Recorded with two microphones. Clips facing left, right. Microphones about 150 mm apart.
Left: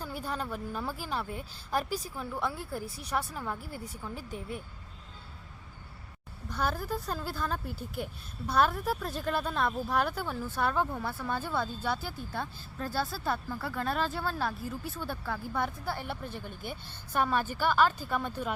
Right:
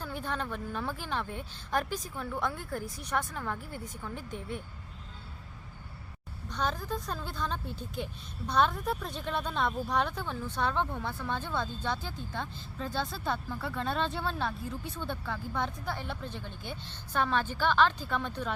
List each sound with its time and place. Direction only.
0.0 s a woman's voice: 10° left (ahead or behind)
2.8 s speech: 30° left (ahead or behind)
3.1 s a woman's voice: 10° left (ahead or behind)
6.5 s a woman's voice: 10° left (ahead or behind)